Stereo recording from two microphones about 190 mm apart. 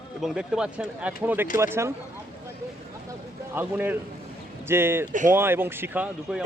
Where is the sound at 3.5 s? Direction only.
10° right (ahead or behind).